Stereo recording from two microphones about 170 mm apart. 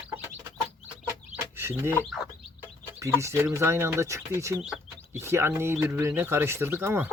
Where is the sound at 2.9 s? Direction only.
15° right (ahead or behind).